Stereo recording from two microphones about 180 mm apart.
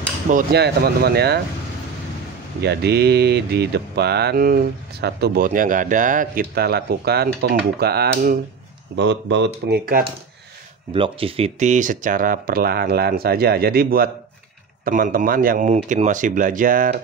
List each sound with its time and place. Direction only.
0.5 s speech: 65° right (ahead or behind)
2.6 s speech: 65° right (ahead or behind)
8.9 s speech: 75° right (ahead or behind); by 10.0 s 60° right (ahead or behind)
10.9 s speech: 30° right (ahead or behind); by 16.9 s 50° right (ahead or behind)